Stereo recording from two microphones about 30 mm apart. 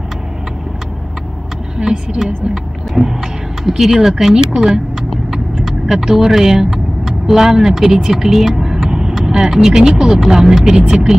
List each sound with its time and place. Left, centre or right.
1.8 s speech: right
3.0 s speech: centre
5.3 s vehicle: centre
7.8 s speech: centre